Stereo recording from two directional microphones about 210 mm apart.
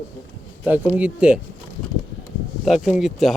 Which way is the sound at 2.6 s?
Centre (ahead or behind).